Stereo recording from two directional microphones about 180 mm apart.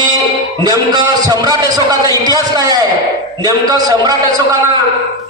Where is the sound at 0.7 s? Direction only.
20° right (ahead or behind).